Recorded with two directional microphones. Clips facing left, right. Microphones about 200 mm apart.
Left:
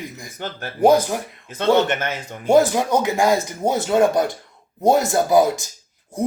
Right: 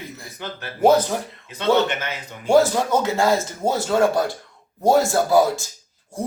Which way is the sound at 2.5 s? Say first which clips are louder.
Left 1 dB; 15° left (ahead or behind).